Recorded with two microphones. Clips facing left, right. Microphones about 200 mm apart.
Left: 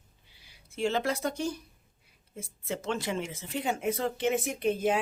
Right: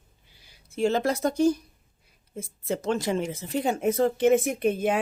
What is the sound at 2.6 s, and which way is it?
Speech, 40° right (ahead or behind).